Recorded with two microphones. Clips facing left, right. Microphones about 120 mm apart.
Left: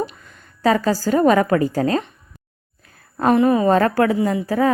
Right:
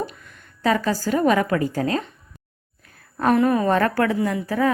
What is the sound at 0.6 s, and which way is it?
A woman's voice, 35° left (ahead or behind).